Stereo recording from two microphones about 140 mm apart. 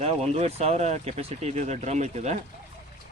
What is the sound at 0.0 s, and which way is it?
Speech, 50° right (ahead or behind).